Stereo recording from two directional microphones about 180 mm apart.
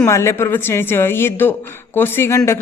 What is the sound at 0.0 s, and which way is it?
Speech, 15° left (ahead or behind).